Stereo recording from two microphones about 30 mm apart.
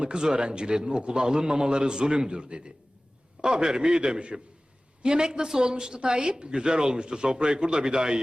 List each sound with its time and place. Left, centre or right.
0.0 s a man's voice: right